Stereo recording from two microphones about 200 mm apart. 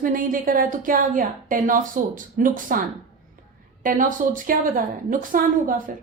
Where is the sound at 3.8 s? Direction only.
40° right (ahead or behind).